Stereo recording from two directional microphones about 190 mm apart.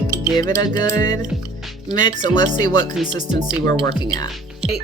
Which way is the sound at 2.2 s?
25° left (ahead or behind).